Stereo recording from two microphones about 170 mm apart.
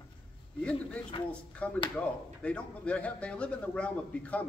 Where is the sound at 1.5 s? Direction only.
5° left (ahead or behind).